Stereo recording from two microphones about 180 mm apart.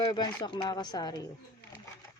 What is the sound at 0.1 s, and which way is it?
Speech, 25° left (ahead or behind).